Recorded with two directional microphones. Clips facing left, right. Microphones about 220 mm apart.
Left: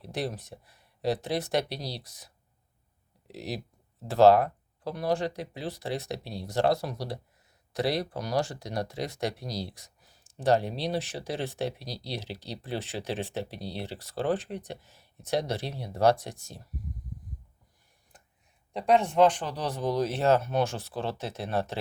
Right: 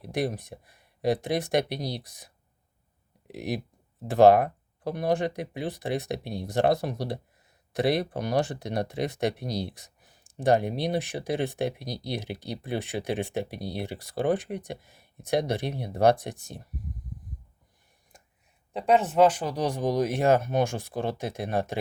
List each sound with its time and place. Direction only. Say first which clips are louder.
0.0 s speech: right 4 dB; 15° right (ahead or behind)
3.2 s speech: right 4 dB; 15° right (ahead or behind)
9.4 s speech: right 4 dB; 60° right (ahead or behind)
9.7 s speech: right 2 dB; 20° right (ahead or behind)
12.0 s speech: right 4 dB; 55° right (ahead or behind)
12.3 s speech: right 3 dB; 15° right (ahead or behind)
18.1 s a sound: right 2 dB; 10° right (ahead or behind)
18.7 s speech: right 1 dB; 5° right (ahead or behind)